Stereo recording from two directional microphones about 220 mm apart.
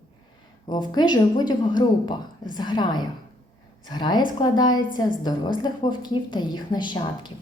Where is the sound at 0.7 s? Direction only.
20° left (ahead or behind).